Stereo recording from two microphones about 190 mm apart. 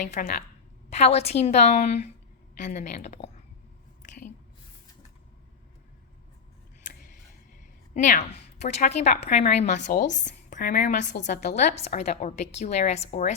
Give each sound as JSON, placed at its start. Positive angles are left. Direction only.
{"t": 0.0, "sound": "speech", "side_deg": 45}
{"t": 0.9, "sound": "a woman's voice", "side_deg": 35}
{"t": 7.9, "sound": "a woman's voice", "side_deg": 40}